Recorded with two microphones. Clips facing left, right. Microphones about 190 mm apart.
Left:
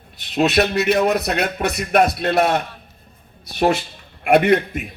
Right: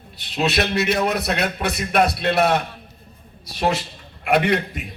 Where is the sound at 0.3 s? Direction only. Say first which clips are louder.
Left 4 dB; 45° left (ahead or behind).